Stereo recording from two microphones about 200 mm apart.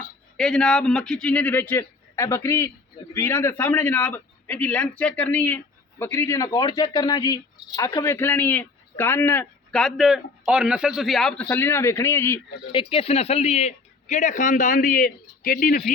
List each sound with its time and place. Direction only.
0.3 s a man's voice: 5° left (ahead or behind)
12.7 s speech: 30° left (ahead or behind); by 15.9 s 45° left (ahead or behind)